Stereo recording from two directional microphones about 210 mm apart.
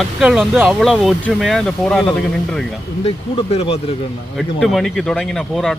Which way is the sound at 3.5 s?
30° left (ahead or behind).